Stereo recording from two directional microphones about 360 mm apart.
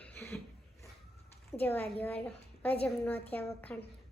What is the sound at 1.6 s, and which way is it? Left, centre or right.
Speech, centre.